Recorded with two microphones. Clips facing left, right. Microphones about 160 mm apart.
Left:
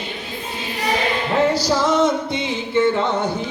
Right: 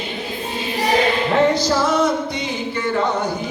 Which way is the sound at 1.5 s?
15° left (ahead or behind).